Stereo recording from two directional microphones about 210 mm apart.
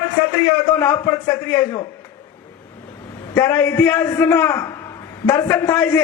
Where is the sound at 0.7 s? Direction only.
10° left (ahead or behind).